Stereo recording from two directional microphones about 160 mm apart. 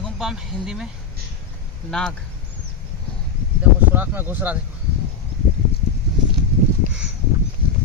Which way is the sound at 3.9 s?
10° right (ahead or behind).